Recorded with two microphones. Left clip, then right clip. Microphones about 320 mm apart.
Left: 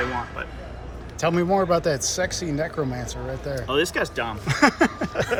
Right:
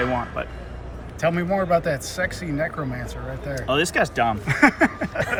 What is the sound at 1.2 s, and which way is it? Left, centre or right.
Speech, centre.